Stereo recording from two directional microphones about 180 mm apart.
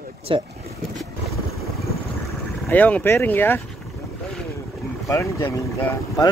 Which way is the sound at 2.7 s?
10° left (ahead or behind).